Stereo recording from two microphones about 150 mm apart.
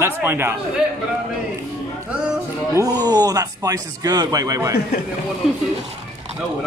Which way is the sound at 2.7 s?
25° right (ahead or behind).